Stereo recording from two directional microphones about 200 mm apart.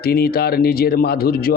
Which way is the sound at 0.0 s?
50° left (ahead or behind).